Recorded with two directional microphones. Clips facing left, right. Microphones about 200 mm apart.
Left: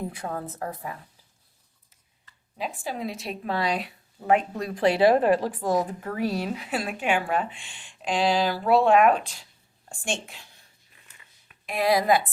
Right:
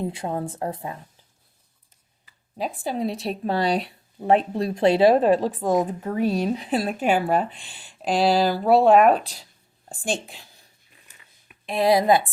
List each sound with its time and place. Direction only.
0.0 s a woman's voice: 25° right (ahead or behind)
2.6 s a woman's voice: 30° right (ahead or behind)
6.7 s speech: 35° right (ahead or behind)
11.6 s a woman's voice: 30° right (ahead or behind)